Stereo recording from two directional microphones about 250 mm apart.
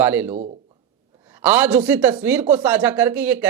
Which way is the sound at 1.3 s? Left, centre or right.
Centre.